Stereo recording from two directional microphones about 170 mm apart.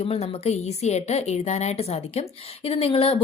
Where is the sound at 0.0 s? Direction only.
35° left (ahead or behind).